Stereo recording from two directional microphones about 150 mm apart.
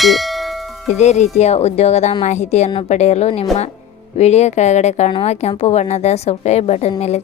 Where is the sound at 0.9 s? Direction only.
50° left (ahead or behind).